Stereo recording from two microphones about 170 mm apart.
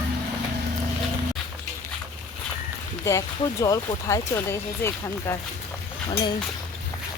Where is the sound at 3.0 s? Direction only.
20° left (ahead or behind).